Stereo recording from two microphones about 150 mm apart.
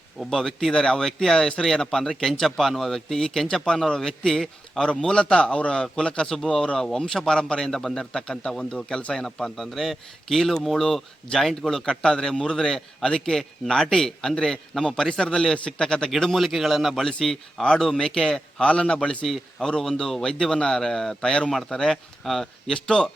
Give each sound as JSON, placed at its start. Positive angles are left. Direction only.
{"t": 0.2, "sound": "speech", "side_deg": 5}